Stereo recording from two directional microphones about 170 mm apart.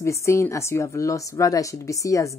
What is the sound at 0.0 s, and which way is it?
A woman's voice, 15° left (ahead or behind).